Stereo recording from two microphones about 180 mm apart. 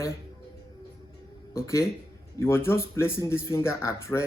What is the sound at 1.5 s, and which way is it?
Speech, 15° left (ahead or behind).